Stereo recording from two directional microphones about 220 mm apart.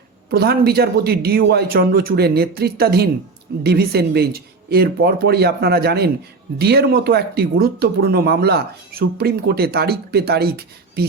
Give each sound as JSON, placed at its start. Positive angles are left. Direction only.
{"t": 0.3, "sound": "speech", "side_deg": -45}